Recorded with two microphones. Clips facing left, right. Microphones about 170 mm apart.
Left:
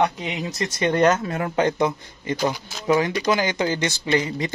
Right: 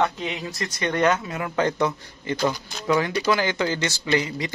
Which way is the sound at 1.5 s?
20° left (ahead or behind).